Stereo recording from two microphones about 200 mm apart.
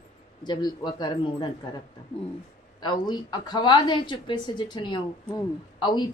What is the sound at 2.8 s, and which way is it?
A woman's voice, 20° left (ahead or behind).